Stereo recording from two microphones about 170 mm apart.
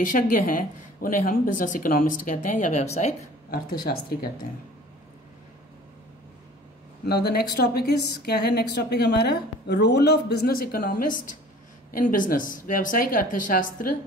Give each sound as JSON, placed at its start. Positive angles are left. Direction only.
{"t": 0.1, "sound": "speech", "side_deg": 55}
{"t": 3.4, "sound": "speech", "side_deg": 60}
{"t": 7.1, "sound": "a woman's voice", "side_deg": 70}